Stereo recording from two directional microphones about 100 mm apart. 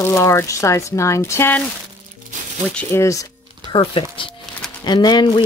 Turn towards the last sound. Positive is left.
turn(degrees=45)  # may be behind; listen again after turning